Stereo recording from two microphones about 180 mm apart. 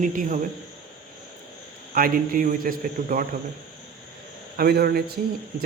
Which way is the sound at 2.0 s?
55° right (ahead or behind).